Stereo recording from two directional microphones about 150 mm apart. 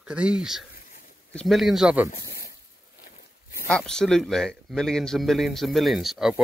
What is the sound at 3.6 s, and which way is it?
Speech, 5° left (ahead or behind).